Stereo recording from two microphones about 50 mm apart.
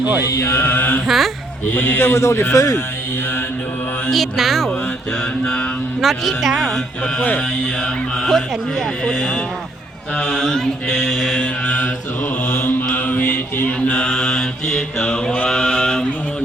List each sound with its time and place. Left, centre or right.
0.3 s mantra: left
0.8 s speech: left
1.0 s speech: centre
1.7 s speech: left
2.1 s a man's voice: left
4.1 s speech: centre
6.0 s speech: centre
6.7 s chant: centre
7.2 s mantra: left
8.2 s chant: centre
12.5 s mantra: left
13.7 s mantra: left